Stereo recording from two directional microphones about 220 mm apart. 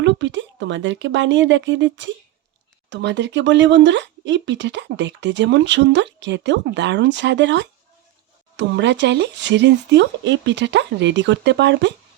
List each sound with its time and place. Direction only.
0.0 s speech: 55° right (ahead or behind)